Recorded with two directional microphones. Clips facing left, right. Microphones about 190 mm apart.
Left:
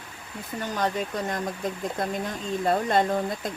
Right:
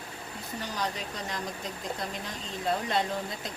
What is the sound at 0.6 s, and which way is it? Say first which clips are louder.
Speech: left 7 dB; 50° left (ahead or behind).